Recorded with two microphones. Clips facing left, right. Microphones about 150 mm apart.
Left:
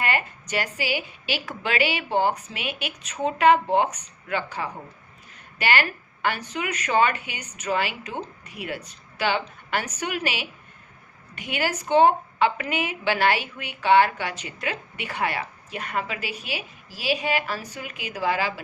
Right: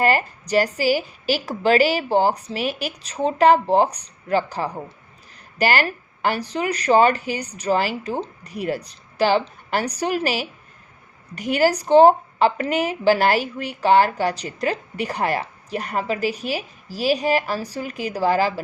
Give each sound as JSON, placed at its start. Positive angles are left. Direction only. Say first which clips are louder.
{"t": 0.0, "sound": "a woman's voice", "louder": "right 7 dB", "side_deg": -40}